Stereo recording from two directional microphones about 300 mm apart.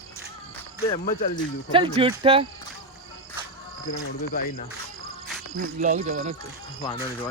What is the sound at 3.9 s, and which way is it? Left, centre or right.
Speech, left.